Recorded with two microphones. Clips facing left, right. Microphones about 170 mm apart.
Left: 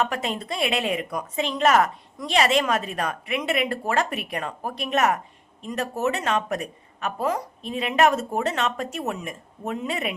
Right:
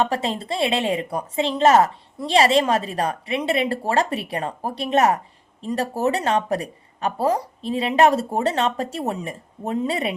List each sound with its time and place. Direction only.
0.0 s a woman's voice: 30° right (ahead or behind)